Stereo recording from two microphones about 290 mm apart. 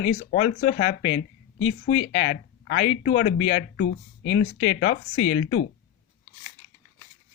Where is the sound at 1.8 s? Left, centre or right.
Left.